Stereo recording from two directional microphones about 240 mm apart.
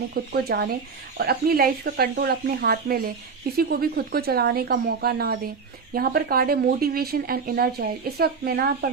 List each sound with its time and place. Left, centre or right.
0.1 s speech: right